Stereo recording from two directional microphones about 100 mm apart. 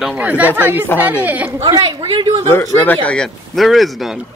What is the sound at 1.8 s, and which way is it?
Speech, 60° right (ahead or behind).